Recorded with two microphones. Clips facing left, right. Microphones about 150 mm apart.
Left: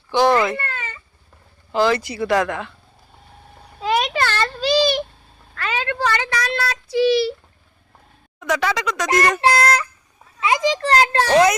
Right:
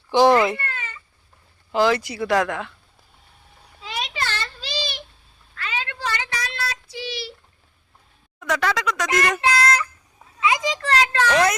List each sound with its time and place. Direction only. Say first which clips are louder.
0.1 s speech: right 1 dB; 25° right (ahead or behind)
1.7 s speech: left 1 dB; 10° right (ahead or behind)
2.0 s speech: left 2 dB; centre (ahead or behind)
3.8 s a sound: left 10 dB; 55° left (ahead or behind)
5.5 s child singing: left 7 dB; 60° left (ahead or behind)
8.4 s speech: left 2 dB; centre (ahead or behind)
9.4 s a child's voice: left 4 dB; 35° left (ahead or behind)